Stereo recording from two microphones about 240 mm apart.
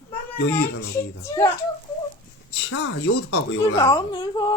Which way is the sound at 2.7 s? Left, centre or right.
Left.